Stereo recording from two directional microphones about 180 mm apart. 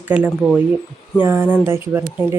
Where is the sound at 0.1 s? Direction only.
5° right (ahead or behind).